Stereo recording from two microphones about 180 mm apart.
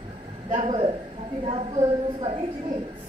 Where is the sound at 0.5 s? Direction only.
35° right (ahead or behind).